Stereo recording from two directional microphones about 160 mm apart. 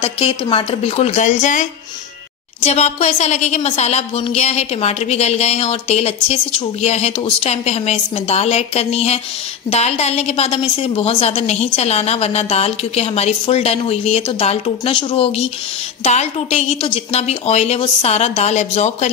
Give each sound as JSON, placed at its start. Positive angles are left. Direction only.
{"t": 0.0, "sound": "a woman's voice", "side_deg": 35}